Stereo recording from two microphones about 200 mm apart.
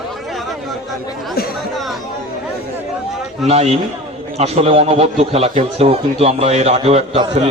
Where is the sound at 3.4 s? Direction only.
30° right (ahead or behind).